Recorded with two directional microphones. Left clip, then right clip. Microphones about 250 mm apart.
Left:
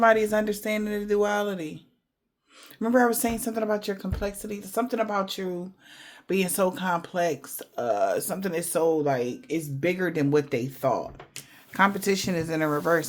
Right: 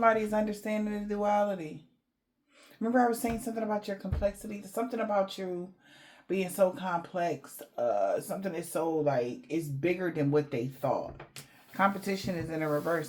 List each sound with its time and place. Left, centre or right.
0.0 s speech: left
2.8 s speech: left